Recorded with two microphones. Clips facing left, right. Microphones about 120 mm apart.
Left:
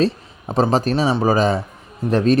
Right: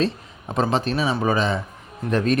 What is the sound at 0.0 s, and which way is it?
Speech, 30° left (ahead or behind).